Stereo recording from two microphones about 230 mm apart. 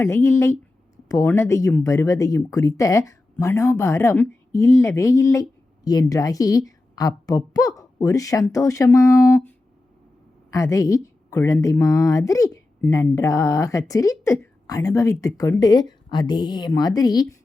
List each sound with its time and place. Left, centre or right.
0.0 s a woman's voice: centre